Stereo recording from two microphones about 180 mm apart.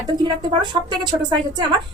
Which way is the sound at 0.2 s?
25° right (ahead or behind).